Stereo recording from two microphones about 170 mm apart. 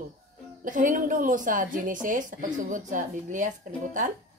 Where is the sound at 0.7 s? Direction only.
50° right (ahead or behind).